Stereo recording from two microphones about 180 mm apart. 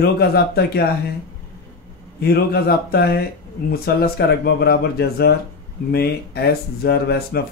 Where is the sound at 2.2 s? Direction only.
60° left (ahead or behind).